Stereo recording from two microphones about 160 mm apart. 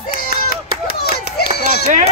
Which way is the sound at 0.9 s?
75° left (ahead or behind).